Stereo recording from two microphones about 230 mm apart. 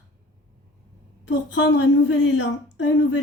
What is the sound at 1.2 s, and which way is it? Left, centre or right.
A woman's voice, left.